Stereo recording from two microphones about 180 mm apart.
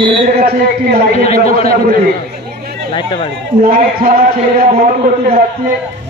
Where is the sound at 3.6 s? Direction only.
50° right (ahead or behind).